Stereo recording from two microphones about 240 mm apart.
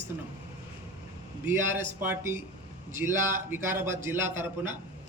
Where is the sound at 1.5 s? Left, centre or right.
Centre.